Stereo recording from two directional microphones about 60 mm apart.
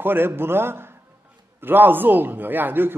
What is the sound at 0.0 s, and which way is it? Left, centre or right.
A man's voice, right.